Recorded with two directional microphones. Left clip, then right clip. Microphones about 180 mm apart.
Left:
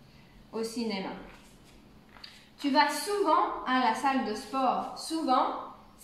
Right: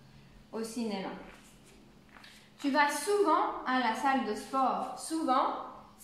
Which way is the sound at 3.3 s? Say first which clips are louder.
Left 2 dB; 10° right (ahead or behind).